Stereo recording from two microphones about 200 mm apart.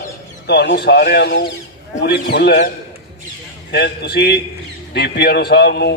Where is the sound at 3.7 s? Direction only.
55° left (ahead or behind).